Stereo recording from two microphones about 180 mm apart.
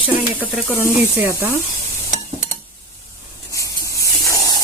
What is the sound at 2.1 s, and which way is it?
Stir, 45° right (ahead or behind).